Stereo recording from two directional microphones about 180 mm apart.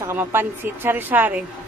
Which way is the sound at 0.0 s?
15° right (ahead or behind).